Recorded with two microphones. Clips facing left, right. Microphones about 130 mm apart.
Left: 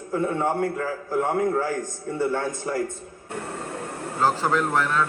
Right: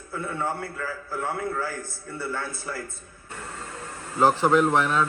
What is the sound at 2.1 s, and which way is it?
Speech, 20° left (ahead or behind).